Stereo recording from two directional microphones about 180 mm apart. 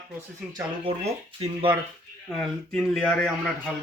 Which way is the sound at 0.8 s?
35° right (ahead or behind).